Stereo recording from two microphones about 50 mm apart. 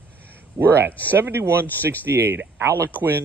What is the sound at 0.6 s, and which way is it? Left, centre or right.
Speech, right.